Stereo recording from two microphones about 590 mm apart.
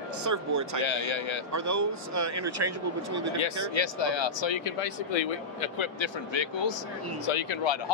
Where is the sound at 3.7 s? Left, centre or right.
Left.